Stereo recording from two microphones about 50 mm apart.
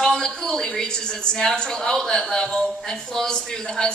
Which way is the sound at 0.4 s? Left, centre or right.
Centre.